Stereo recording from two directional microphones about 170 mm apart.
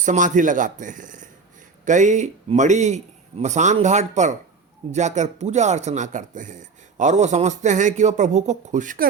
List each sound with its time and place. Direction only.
0.0 s speech: 50° right (ahead or behind)